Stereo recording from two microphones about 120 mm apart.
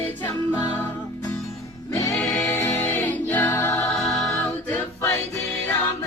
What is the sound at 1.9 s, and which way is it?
Music, 25° left (ahead or behind).